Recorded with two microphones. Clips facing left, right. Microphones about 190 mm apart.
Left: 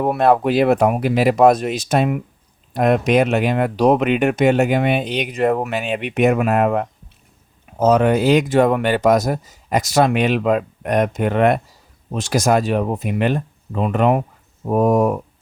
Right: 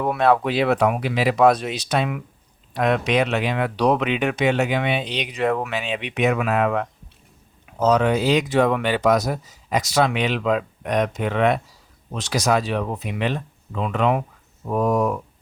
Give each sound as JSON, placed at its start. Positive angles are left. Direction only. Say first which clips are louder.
{"t": 0.0, "sound": "speech", "louder": "left 3 dB", "side_deg": 45}